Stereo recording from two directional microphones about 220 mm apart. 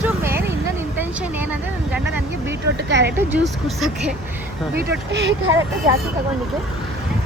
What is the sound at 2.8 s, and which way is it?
Speech, 50° right (ahead or behind).